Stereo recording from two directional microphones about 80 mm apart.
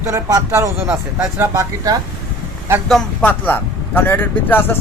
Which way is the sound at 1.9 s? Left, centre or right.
Right.